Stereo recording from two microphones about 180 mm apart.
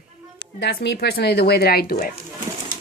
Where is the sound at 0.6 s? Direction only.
65° left (ahead or behind).